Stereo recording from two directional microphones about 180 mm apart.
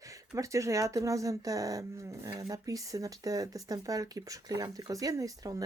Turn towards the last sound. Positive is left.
turn(degrees=-20)  # may be behind; listen again after turning